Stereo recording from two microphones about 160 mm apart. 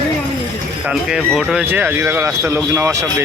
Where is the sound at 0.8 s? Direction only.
5° right (ahead or behind).